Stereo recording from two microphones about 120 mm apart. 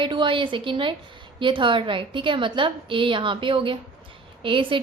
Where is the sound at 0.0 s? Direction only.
40° right (ahead or behind).